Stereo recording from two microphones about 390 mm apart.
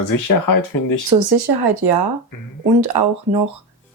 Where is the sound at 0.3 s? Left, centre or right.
Left.